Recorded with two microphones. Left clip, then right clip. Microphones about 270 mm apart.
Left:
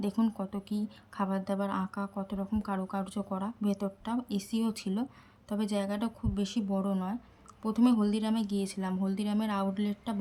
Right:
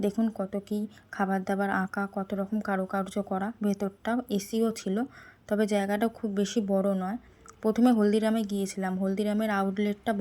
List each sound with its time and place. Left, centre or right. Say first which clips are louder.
0.0 s speech: right 4 dB; centre